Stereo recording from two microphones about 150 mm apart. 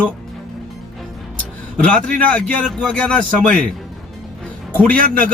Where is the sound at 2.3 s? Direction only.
5° left (ahead or behind).